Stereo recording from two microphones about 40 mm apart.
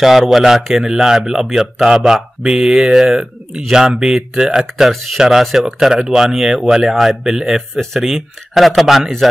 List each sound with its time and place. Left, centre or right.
0.0 s speech: centre
4.8 s speech: centre
8.0 s speech: centre